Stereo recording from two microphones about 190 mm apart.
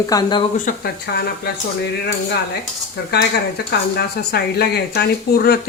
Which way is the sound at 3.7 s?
55° left (ahead or behind).